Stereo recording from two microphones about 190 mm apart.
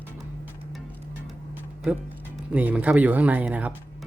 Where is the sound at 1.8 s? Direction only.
5° right (ahead or behind).